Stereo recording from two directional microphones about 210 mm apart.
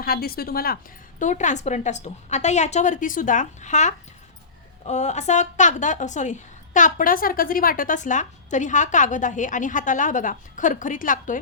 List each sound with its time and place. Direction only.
0.0 s a woman's voice: 45° left (ahead or behind)